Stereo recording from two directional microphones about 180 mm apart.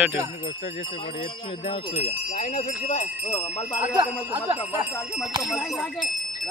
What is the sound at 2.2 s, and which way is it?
Speech, 45° left (ahead or behind).